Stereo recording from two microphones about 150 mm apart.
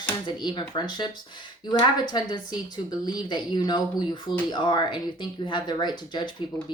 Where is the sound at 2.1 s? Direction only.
30° left (ahead or behind).